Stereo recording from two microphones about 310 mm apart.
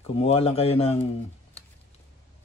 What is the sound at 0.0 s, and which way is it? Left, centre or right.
Speech, centre.